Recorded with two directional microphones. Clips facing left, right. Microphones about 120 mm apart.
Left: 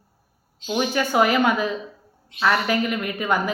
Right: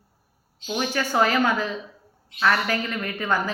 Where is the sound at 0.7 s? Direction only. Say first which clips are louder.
Left 3 dB; 15° left (ahead or behind).